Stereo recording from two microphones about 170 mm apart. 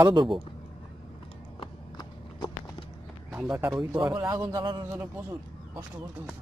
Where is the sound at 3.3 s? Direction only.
10° right (ahead or behind).